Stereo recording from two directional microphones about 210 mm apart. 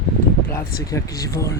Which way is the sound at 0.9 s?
15° left (ahead or behind).